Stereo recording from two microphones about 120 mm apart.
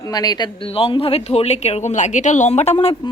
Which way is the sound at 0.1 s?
35° left (ahead or behind).